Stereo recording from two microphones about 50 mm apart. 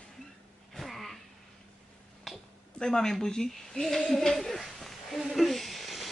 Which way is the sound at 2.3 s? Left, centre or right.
Centre.